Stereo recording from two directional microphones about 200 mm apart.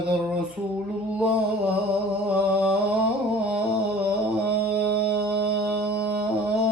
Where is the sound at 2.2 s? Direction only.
5° right (ahead or behind).